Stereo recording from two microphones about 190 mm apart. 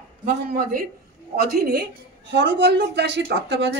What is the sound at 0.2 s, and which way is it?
A woman's voice, 45° right (ahead or behind).